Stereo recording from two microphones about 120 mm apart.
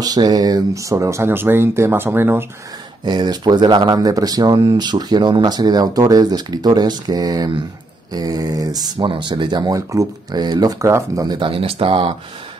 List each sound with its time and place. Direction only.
0.0 s speech: 35° right (ahead or behind)
3.1 s speech: 35° right (ahead or behind)